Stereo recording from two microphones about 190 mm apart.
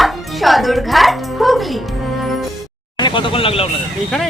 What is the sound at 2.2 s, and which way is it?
Music, centre (ahead or behind).